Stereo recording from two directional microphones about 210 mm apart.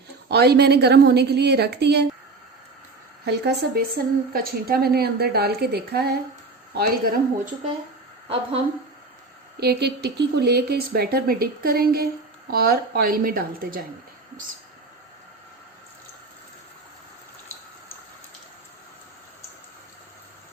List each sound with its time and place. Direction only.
0.3 s a woman's voice: 50° right (ahead or behind)
3.2 s a woman's voice: 50° right (ahead or behind)
9.6 s a woman's voice: 50° right (ahead or behind)